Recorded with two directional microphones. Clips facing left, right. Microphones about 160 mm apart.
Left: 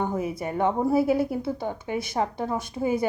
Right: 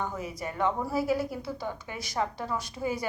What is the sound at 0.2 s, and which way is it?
A woman's voice, 55° left (ahead or behind).